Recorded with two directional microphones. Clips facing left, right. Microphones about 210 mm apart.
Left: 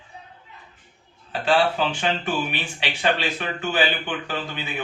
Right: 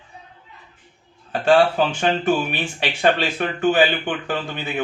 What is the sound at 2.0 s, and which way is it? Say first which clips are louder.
Speech: right 5 dB; 45° right (ahead or behind).